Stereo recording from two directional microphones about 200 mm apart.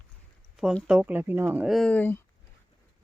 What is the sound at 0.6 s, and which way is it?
Speech, centre (ahead or behind).